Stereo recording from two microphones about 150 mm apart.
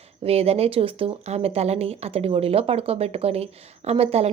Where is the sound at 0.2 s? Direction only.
40° right (ahead or behind).